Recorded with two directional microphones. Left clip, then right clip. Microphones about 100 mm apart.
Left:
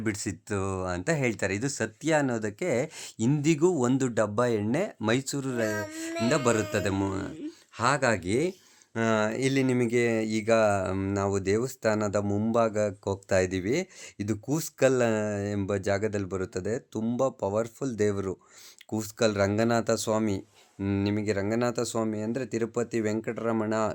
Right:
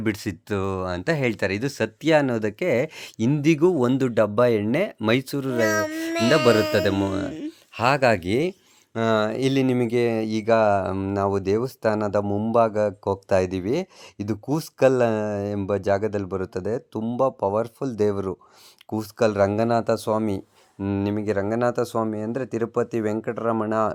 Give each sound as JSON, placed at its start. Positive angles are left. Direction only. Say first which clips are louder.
{"t": 0.0, "sound": "speech", "louder": "right 5 dB", "side_deg": -45}
{"t": 5.6, "sound": "speech", "louder": "right 9 dB", "side_deg": -70}